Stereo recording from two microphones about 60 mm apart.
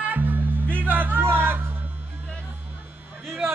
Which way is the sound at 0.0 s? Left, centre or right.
Right.